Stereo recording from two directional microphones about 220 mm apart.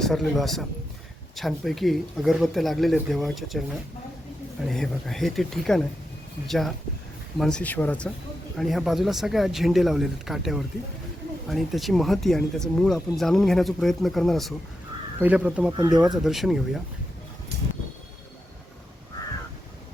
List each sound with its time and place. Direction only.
0.0 s speech: centre (ahead or behind)
4.7 s speech: centre (ahead or behind)